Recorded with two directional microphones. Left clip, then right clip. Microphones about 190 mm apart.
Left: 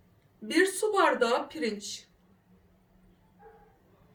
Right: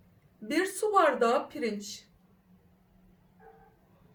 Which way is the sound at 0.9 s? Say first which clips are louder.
Right 1 dB; 20° right (ahead or behind).